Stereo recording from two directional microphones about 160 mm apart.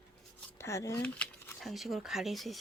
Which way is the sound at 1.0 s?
5° left (ahead or behind).